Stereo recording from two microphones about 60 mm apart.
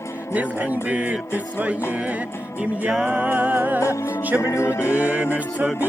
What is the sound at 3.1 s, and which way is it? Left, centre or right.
Music, right.